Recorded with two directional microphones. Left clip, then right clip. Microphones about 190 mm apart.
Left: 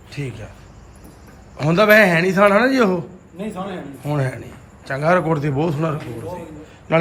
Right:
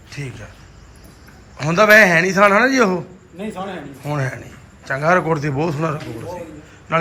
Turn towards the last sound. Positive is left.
turn(degrees=10)  # may be behind; listen again after turning